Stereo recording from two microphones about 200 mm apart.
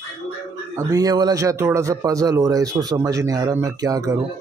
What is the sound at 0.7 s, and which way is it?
A man's voice, 15° right (ahead or behind).